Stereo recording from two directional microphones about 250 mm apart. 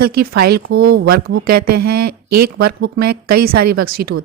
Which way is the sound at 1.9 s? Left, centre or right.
Right.